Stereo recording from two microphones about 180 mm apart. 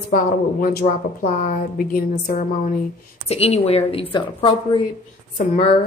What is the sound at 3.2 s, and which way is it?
A woman's voice, 35° left (ahead or behind).